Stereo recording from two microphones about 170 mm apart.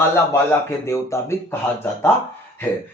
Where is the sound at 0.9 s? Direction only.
15° left (ahead or behind).